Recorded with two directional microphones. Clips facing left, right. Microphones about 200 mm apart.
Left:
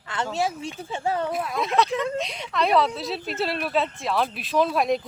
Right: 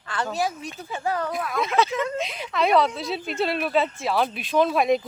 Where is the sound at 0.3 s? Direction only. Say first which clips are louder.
Left 1 dB; 25° left (ahead or behind).